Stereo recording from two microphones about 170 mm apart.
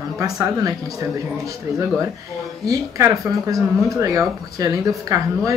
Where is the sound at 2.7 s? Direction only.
20° right (ahead or behind).